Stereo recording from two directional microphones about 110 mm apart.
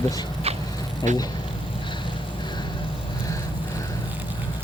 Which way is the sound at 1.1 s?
90° right.